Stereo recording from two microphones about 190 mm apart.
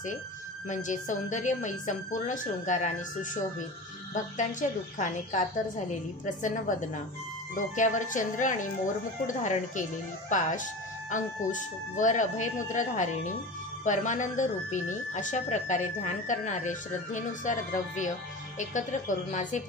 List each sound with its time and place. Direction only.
0.7 s speech: 40° left (ahead or behind)